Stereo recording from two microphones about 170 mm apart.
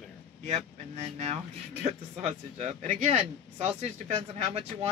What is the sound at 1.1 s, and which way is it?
Speech, 40° right (ahead or behind).